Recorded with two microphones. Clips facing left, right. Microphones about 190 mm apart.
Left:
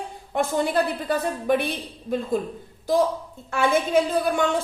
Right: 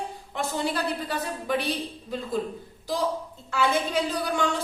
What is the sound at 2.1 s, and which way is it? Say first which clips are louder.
Speech: left 8 dB; 50° left (ahead or behind).